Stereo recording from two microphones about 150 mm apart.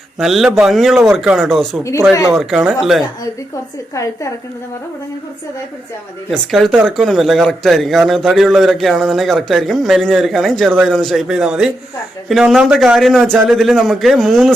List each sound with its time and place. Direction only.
0.2 s speech: centre (ahead or behind)
3.9 s a woman's voice: 20° left (ahead or behind)
6.3 s speech: centre (ahead or behind)